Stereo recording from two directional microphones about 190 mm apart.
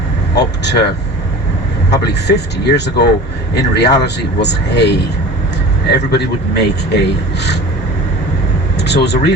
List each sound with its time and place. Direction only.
0.3 s speech: 60° left (ahead or behind)
1.9 s speech: 60° left (ahead or behind)
6.5 s speech: 60° left (ahead or behind)
8.8 s speech: 60° left (ahead or behind)